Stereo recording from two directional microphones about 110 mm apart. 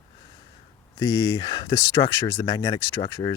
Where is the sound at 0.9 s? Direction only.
30° left (ahead or behind).